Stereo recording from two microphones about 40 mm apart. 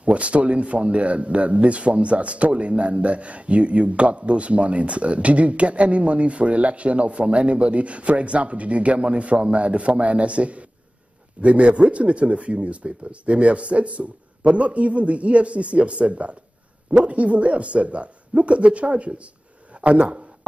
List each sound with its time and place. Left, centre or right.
0.0 s a man's voice: right